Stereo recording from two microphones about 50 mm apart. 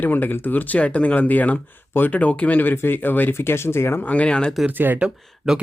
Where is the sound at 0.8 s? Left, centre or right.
Left.